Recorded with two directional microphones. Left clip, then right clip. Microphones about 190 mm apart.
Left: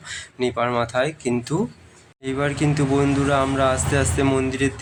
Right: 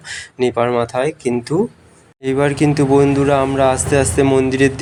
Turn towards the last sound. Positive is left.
turn(degrees=-30)  # may be behind; listen again after turning